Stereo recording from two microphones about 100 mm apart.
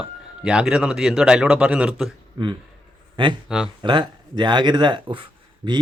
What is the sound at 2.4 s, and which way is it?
Speech, 55° right (ahead or behind).